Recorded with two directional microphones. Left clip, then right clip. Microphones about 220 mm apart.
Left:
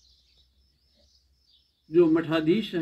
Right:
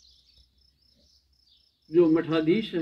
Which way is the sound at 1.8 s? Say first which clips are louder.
Even; 50° left (ahead or behind).